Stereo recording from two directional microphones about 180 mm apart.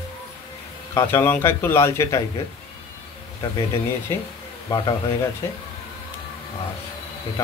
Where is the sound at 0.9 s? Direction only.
15° left (ahead or behind).